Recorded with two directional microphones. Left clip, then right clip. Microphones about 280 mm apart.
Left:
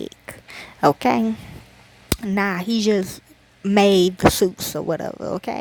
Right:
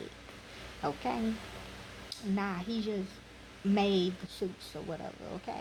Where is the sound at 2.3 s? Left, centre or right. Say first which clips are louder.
Left 13 dB; left.